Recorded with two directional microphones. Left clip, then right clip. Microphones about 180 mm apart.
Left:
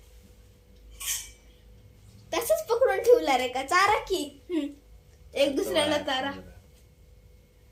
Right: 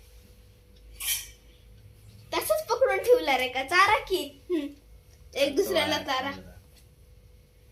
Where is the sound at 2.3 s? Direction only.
45° left (ahead or behind).